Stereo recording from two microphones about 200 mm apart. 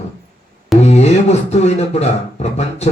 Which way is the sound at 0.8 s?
35° left (ahead or behind).